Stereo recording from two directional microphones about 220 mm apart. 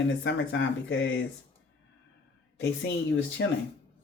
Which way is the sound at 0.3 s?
50° left (ahead or behind).